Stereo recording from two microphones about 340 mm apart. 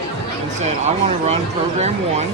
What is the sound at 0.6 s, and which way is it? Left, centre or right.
Speech, centre.